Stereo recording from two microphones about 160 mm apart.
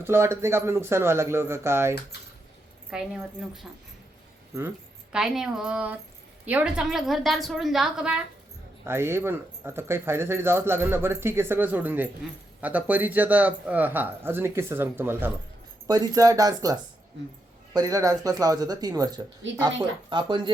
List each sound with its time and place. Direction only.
0.0 s speech: 15° right (ahead or behind)
2.9 s a woman's voice: 5° right (ahead or behind)
5.1 s a woman's voice: 5° right (ahead or behind)
8.8 s speech: 15° right (ahead or behind)
17.7 s speech: 20° right (ahead or behind)